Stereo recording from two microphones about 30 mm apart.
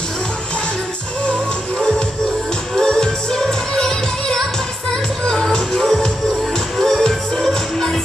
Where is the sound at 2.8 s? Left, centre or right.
Left.